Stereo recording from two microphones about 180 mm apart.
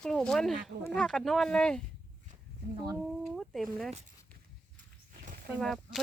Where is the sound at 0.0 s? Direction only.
5° left (ahead or behind).